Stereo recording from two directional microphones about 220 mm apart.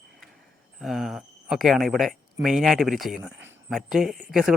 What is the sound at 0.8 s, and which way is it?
Speech, centre (ahead or behind).